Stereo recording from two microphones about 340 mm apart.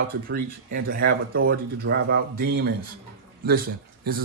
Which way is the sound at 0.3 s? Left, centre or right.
Right.